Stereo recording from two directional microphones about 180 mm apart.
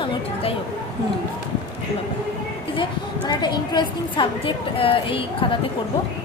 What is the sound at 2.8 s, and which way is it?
A woman's voice, 25° left (ahead or behind).